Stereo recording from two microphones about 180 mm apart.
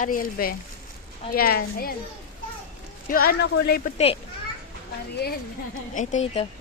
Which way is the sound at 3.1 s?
55° left (ahead or behind).